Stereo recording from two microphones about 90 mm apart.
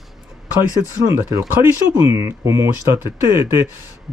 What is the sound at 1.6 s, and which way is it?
Speech, 25° right (ahead or behind).